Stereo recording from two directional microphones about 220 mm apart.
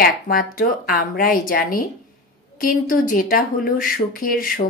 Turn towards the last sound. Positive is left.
turn(degrees=40)  # may be behind; listen again after turning